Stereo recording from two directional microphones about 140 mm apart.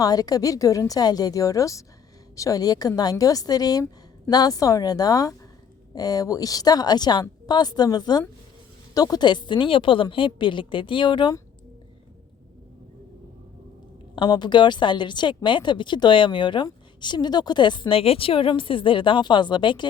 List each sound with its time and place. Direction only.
0.0 s a woman's voice: 25° left (ahead or behind)
14.2 s a woman's voice: 30° left (ahead or behind)